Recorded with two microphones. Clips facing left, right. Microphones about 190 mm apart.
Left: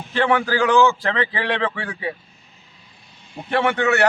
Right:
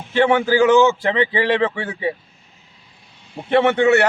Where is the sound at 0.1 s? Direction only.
20° right (ahead or behind).